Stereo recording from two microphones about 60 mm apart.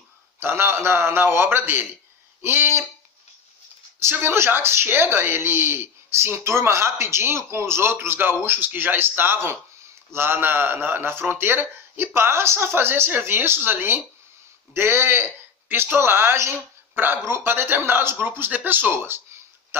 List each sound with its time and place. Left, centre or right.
0.4 s speech: right
4.0 s speech: right